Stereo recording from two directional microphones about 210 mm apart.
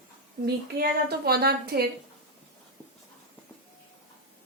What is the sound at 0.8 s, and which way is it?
A woman's voice, 50° right (ahead or behind).